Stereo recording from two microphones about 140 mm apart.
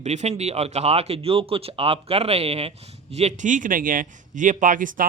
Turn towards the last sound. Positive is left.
turn(degrees=-70)  # may be behind; listen again after turning